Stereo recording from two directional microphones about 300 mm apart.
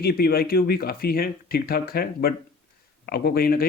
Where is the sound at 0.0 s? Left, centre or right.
Left.